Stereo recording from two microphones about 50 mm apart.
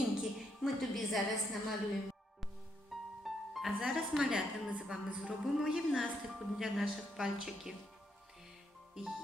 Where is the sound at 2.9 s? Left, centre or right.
Centre.